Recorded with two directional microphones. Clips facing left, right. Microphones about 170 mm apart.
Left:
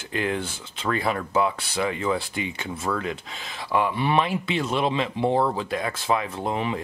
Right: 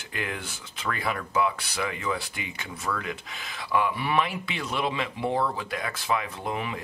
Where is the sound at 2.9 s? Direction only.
30° left (ahead or behind).